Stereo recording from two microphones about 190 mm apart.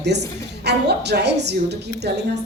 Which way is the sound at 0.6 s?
60° right (ahead or behind).